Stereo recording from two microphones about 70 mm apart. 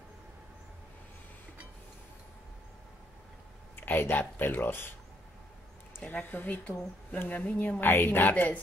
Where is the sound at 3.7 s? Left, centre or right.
Left.